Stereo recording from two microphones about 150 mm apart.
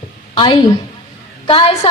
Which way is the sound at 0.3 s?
35° left (ahead or behind).